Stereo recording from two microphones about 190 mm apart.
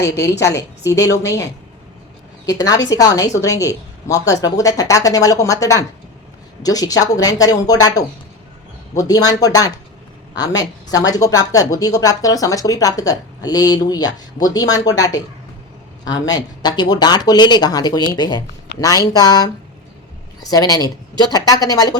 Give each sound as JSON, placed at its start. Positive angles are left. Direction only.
{"t": 0.9, "sound": "a woman's voice", "side_deg": 15}
{"t": 2.5, "sound": "a woman's voice", "side_deg": 20}